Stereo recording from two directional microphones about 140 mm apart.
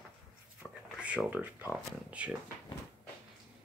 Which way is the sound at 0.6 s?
10° right (ahead or behind).